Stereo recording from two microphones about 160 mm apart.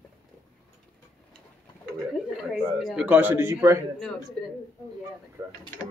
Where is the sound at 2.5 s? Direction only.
5° right (ahead or behind).